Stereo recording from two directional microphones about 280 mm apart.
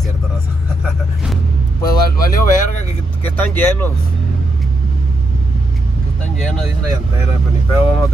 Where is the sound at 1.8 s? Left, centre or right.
Left.